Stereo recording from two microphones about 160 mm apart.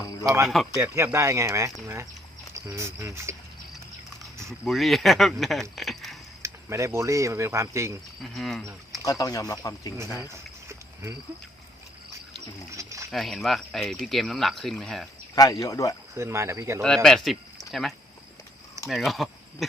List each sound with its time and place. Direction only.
0.0 s cricket: 20° left (ahead or behind)
0.4 s speech: centre (ahead or behind)
0.8 s speech: 15° right (ahead or behind)
4.6 s speech: centre (ahead or behind)
6.4 s speech: 20° right (ahead or behind)
8.2 s speech: centre (ahead or behind)
9.0 s speech: 20° left (ahead or behind)
10.2 s a sound: 15° right (ahead or behind)
12.7 s a sound: 20° right (ahead or behind)
13.1 s speech: centre (ahead or behind)
15.4 s speech: 25° left (ahead or behind)
16.1 s speech: 15° right (ahead or behind)
16.8 s speech: 5° left (ahead or behind)